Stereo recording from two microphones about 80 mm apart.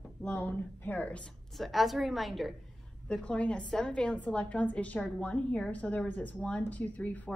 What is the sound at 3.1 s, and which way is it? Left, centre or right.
A woman's voice, centre.